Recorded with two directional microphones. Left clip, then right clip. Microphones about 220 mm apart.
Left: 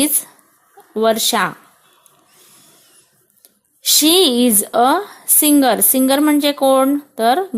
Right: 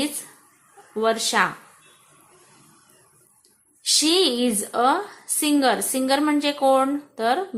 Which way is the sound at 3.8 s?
35° left (ahead or behind).